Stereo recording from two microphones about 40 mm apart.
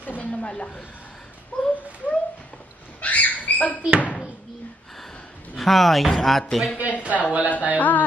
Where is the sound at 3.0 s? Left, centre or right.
Left.